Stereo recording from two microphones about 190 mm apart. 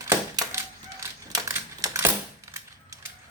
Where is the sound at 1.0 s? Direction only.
20° right (ahead or behind).